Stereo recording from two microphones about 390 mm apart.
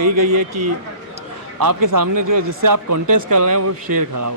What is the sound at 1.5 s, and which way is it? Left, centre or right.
Speech, right.